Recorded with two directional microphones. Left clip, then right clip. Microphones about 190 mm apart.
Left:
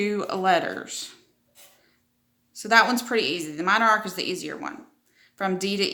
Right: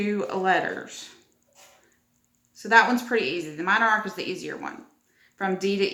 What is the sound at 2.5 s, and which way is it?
Speech, 45° left (ahead or behind).